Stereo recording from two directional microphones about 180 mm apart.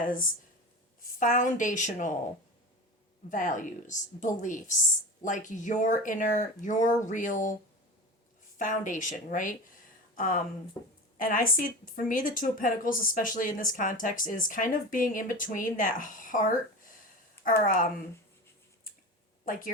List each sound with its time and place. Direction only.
0.0 s a woman's voice: 50° left (ahead or behind)
3.2 s a woman's voice: 45° left (ahead or behind)
8.5 s a woman's voice: 45° left (ahead or behind)
19.5 s a woman's voice: 50° left (ahead or behind)